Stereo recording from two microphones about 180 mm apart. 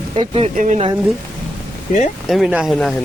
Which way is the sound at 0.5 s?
45° right (ahead or behind).